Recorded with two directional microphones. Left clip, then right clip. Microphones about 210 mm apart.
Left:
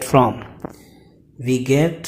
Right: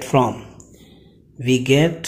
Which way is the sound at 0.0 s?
Centre (ahead or behind).